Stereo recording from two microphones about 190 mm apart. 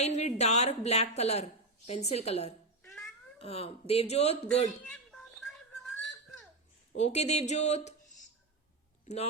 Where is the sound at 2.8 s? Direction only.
Centre (ahead or behind).